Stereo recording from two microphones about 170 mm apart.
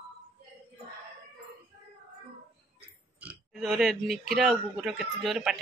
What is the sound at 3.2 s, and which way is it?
Speech, centre (ahead or behind).